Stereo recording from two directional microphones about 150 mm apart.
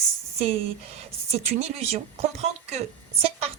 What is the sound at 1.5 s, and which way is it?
A woman's voice, 45° right (ahead or behind).